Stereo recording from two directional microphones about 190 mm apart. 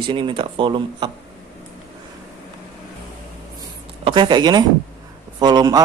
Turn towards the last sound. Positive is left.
turn(degrees=-20)  # may be behind; listen again after turning